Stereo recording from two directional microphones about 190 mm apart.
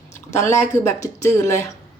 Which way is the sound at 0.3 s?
15° left (ahead or behind).